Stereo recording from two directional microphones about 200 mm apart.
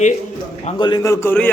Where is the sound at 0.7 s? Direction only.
20° left (ahead or behind).